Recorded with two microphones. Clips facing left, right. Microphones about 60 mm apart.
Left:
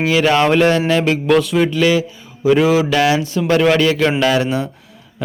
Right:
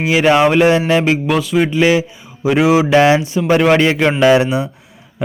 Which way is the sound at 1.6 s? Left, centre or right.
Right.